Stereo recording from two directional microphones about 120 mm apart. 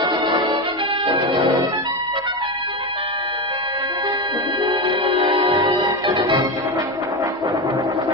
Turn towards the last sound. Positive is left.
turn(degrees=-40)  # may be behind; listen again after turning